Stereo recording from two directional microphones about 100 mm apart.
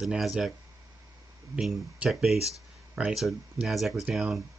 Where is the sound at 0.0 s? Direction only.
5° right (ahead or behind).